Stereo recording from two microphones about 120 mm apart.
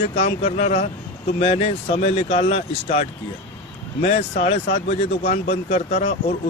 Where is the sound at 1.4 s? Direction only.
55° left (ahead or behind).